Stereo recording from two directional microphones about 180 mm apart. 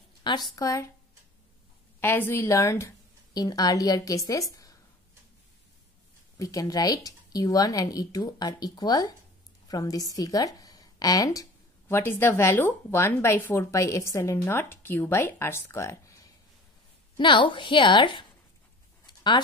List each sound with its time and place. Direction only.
0.2 s speech: 25° left (ahead or behind)
2.0 s speech: 10° left (ahead or behind)
6.3 s a woman's voice: 15° left (ahead or behind)